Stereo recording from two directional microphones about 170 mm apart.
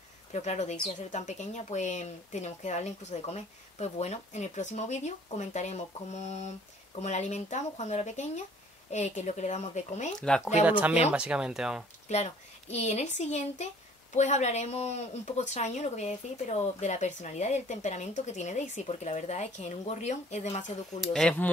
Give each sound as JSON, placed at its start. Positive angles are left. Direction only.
{"t": 0.3, "sound": "speech", "side_deg": 40}
{"t": 10.2, "sound": "speech", "side_deg": 5}
{"t": 10.6, "sound": "speech", "side_deg": -10}
{"t": 12.1, "sound": "speech", "side_deg": 40}
{"t": 21.0, "sound": "speech", "side_deg": 5}